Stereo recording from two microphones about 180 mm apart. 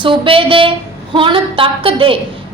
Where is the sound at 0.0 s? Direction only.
30° right (ahead or behind).